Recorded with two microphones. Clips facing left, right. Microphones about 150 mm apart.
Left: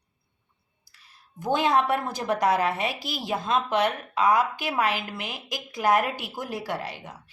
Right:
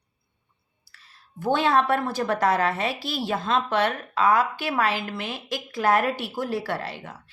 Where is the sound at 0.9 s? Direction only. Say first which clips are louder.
Right 3 dB; 15° left (ahead or behind).